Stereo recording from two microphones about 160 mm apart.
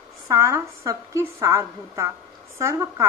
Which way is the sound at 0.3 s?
20° right (ahead or behind).